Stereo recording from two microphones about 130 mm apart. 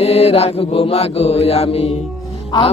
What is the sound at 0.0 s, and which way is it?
Mantra, 50° left (ahead or behind).